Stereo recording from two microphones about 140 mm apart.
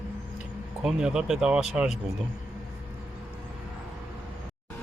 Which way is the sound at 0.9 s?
5° right (ahead or behind).